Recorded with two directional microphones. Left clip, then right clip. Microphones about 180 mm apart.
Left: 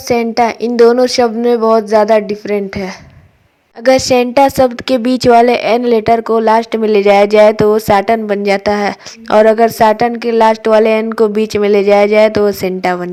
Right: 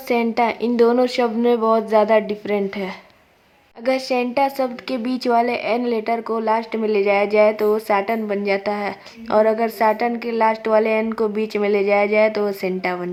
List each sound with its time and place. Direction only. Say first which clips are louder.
0.1 s a woman's voice: left 7 dB; 30° left (ahead or behind)
3.8 s a woman's voice: left 11 dB; 40° left (ahead or behind)